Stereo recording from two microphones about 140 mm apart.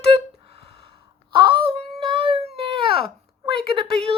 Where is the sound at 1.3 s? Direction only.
35° right (ahead or behind).